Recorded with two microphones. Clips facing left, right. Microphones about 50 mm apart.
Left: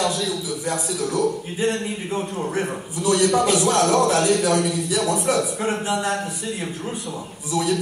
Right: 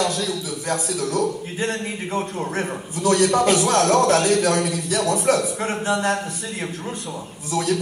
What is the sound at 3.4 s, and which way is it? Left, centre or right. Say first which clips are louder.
Speech: right 1 dB; right.